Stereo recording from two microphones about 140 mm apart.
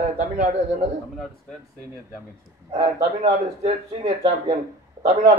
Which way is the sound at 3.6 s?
50° right (ahead or behind).